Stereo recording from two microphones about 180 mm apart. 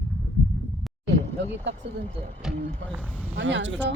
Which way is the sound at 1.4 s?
80° right.